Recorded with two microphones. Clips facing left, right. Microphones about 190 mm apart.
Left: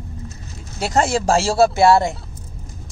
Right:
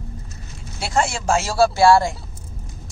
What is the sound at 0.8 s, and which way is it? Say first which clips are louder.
A man's voice: left 4 dB; 40° left (ahead or behind).